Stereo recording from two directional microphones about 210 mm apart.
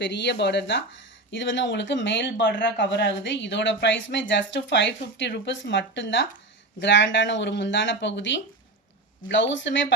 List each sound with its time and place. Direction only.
0.0 s speech: 55° left (ahead or behind)